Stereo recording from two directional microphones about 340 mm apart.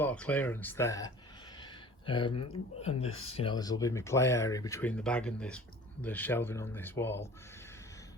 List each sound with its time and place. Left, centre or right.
0.0 s speech: centre
2.3 s speech: left
2.8 s speech: centre